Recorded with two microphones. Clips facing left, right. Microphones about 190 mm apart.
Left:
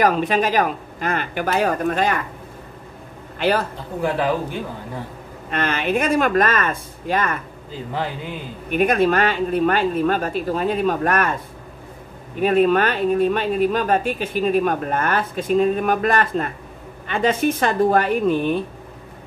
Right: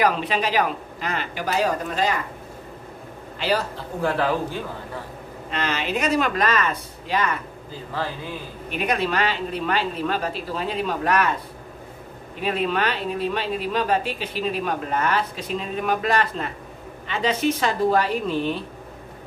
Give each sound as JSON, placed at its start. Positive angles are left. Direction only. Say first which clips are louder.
{"t": 0.0, "sound": "speech", "louder": "left 4 dB", "side_deg": 45}
{"t": 3.3, "sound": "speech", "louder": "left 4 dB", "side_deg": 55}
{"t": 4.0, "sound": "a man's voice", "louder": "left 2 dB", "side_deg": 15}
{"t": 5.5, "sound": "speech", "louder": "left 5 dB", "side_deg": 55}
{"t": 8.6, "sound": "speech", "louder": "left 7 dB", "side_deg": 50}
{"t": 12.4, "sound": "speech", "louder": "left 8 dB", "side_deg": 50}